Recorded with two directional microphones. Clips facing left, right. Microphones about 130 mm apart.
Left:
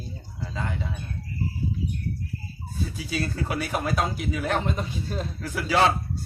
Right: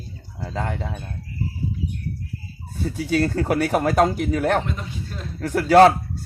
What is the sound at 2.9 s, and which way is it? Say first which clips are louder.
Speech: right 10 dB; 70° right (ahead or behind).